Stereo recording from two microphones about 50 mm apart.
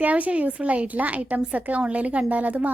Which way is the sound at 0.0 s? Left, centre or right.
Right.